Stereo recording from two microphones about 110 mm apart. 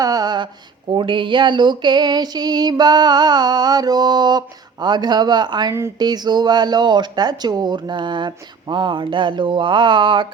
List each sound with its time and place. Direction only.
0.0 s speech: 35° right (ahead or behind)